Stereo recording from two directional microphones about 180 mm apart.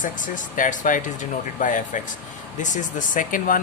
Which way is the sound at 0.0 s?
45° left (ahead or behind).